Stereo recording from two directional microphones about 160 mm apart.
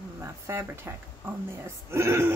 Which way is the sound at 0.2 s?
15° right (ahead or behind).